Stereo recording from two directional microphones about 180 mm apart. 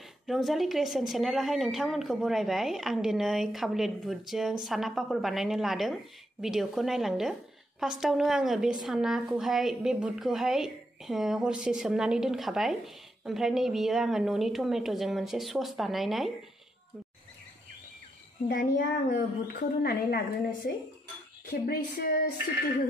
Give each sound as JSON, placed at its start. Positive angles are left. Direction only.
{"t": 0.3, "sound": "a woman's voice", "side_deg": 0}
{"t": 18.8, "sound": "a woman's voice", "side_deg": 55}